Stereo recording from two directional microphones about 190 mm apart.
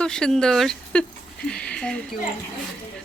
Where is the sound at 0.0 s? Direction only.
5° left (ahead or behind).